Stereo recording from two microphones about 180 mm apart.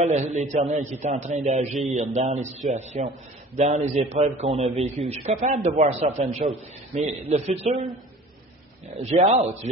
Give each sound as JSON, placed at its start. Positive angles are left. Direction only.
{"t": 0.0, "sound": "a man's voice", "side_deg": -40}
{"t": 9.0, "sound": "a man's voice", "side_deg": -35}